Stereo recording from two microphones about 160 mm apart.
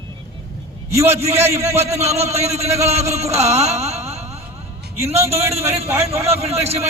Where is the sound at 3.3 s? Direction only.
45° right (ahead or behind).